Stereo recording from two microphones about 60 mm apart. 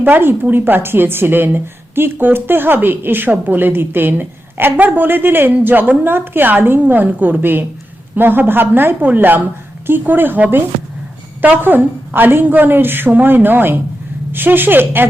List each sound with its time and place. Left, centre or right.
0.0 s a woman's voice: right